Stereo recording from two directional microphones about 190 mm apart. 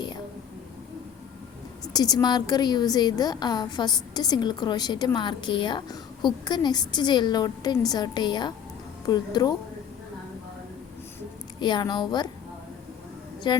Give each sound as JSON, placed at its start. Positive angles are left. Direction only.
{"t": 1.8, "sound": "a woman's voice", "side_deg": 20}
{"t": 11.6, "sound": "a woman's voice", "side_deg": 25}
{"t": 13.5, "sound": "a woman's voice", "side_deg": 20}